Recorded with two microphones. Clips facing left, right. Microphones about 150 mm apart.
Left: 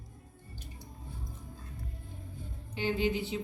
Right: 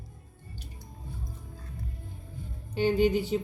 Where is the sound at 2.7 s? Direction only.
40° right (ahead or behind).